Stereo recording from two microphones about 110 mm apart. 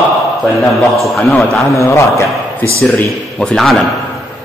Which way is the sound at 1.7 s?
30° left (ahead or behind).